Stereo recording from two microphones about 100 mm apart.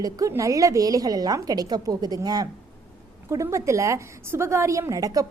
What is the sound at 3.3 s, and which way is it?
A woman's voice, 30° right (ahead or behind).